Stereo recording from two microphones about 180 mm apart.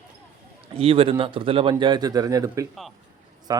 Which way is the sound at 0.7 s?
30° right (ahead or behind).